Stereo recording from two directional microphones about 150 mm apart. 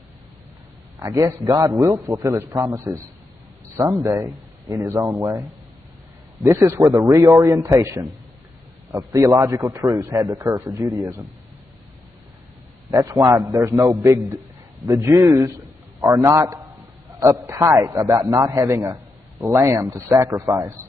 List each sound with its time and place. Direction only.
0.9 s a man's voice: 25° right (ahead or behind)
4.0 s a man's voice: 20° right (ahead or behind)
6.4 s a man's voice: 20° right (ahead or behind)
12.9 s a man's voice: 20° right (ahead or behind)